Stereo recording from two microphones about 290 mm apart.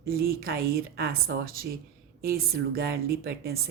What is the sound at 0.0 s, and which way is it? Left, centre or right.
Speech, right.